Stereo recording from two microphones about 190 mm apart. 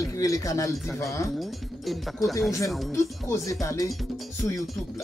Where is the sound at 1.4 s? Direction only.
Centre (ahead or behind).